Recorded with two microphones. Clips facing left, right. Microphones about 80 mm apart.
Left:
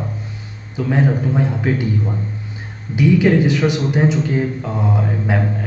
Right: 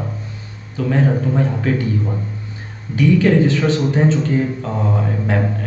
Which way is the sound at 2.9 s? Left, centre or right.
Centre.